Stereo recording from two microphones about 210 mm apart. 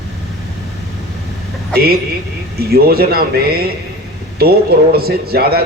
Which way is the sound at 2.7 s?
50° right (ahead or behind).